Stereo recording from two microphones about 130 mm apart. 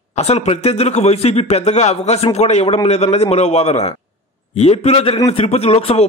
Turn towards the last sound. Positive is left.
turn(degrees=50)  # may be behind; listen again after turning